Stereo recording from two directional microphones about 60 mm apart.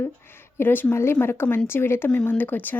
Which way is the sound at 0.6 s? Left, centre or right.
Left.